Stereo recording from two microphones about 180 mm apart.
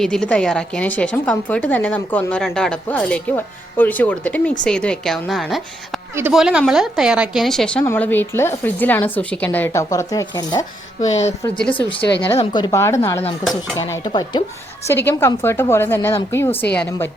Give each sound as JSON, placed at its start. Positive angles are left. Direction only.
{"t": 0.0, "sound": "a woman's voice", "side_deg": 5}
{"t": 11.0, "sound": "a woman's voice", "side_deg": 40}
{"t": 11.4, "sound": "a woman's voice", "side_deg": 5}
{"t": 14.8, "sound": "a woman's voice", "side_deg": 15}